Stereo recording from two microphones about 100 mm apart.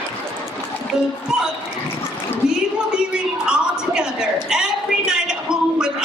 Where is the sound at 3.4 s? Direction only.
10° right (ahead or behind).